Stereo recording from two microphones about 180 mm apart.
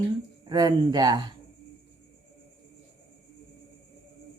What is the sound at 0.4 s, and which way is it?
Speech, 25° right (ahead or behind).